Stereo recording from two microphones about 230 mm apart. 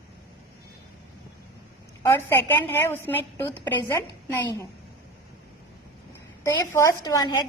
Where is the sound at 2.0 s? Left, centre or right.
Centre.